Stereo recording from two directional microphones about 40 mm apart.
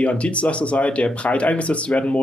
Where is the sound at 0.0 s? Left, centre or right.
Left.